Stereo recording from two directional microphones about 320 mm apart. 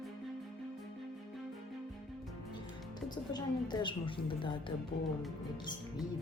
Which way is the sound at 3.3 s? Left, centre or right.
Centre.